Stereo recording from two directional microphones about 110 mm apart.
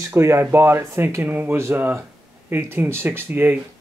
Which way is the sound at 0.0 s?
25° right (ahead or behind).